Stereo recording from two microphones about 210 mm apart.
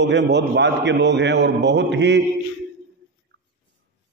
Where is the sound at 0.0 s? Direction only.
55° right (ahead or behind).